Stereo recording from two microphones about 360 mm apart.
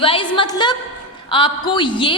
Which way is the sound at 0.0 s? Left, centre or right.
Centre.